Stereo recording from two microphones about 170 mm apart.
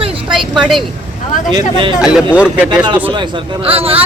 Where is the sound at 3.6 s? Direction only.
35° right (ahead or behind).